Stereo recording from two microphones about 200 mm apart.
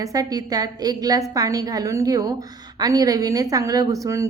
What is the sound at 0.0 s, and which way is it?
A woman's voice, 15° right (ahead or behind).